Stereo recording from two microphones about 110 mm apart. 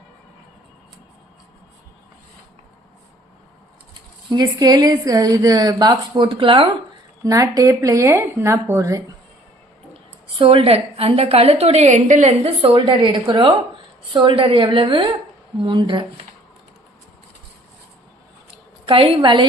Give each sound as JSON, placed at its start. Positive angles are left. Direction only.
{"t": 4.3, "sound": "a woman's voice", "side_deg": -35}
{"t": 7.3, "sound": "speech", "side_deg": -30}
{"t": 9.9, "sound": "a woman's voice", "side_deg": -55}
{"t": 18.9, "sound": "a woman's voice", "side_deg": -55}